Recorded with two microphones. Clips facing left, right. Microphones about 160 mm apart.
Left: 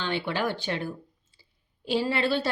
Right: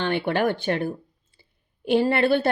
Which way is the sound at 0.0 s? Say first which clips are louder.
Right 6 dB; 55° right (ahead or behind).